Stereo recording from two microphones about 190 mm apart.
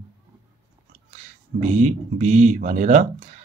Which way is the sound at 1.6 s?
35° right (ahead or behind).